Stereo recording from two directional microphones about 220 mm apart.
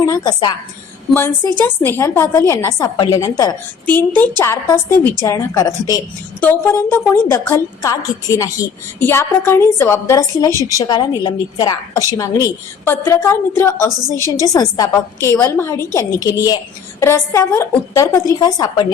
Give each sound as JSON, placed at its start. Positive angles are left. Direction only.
{"t": 0.0, "sound": "a woman's voice", "side_deg": 15}
{"t": 1.5, "sound": "a woman's voice", "side_deg": 10}